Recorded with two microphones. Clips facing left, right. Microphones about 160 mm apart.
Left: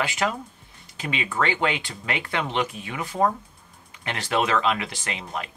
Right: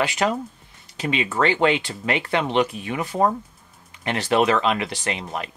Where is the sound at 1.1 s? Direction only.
25° right (ahead or behind).